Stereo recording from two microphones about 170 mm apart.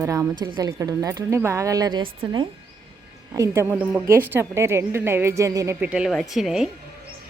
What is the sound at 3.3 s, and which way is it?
A woman's voice, 15° right (ahead or behind).